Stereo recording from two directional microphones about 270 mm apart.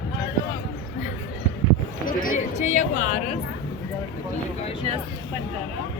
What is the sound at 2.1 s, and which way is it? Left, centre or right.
Chatter, left.